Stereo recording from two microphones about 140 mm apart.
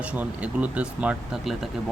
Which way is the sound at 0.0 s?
10° right (ahead or behind).